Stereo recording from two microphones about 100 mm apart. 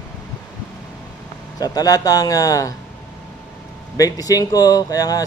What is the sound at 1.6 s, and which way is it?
Speech, 40° left (ahead or behind).